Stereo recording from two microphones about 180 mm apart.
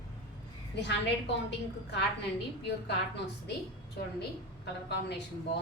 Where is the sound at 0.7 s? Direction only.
70° left (ahead or behind).